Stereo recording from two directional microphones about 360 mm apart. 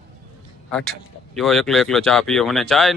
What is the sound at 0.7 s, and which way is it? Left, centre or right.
A man's voice, centre.